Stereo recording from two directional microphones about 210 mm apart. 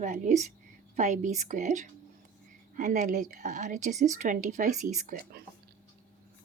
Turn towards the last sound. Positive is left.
turn(degrees=-40)  # may be behind; listen again after turning